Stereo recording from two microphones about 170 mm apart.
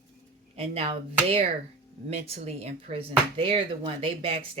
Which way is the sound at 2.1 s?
40° right (ahead or behind).